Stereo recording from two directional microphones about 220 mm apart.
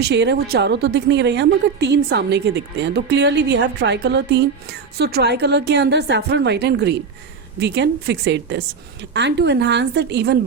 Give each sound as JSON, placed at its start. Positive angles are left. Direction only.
{"t": 0.0, "sound": "a woman's voice", "side_deg": -50}